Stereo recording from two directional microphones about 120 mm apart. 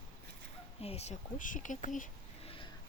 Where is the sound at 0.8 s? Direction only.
60° left (ahead or behind); by 2.1 s 90° left.